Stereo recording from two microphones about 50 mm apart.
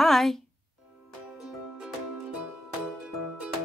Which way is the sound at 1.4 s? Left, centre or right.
Right.